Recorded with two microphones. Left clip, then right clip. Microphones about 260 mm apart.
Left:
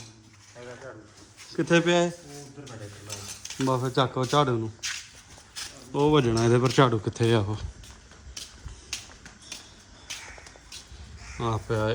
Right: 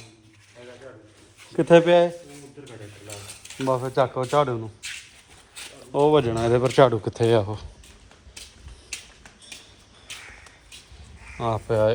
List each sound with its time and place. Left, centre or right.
1.5 s speech: centre
3.7 s speech: centre
5.9 s speech: centre
11.3 s speech: centre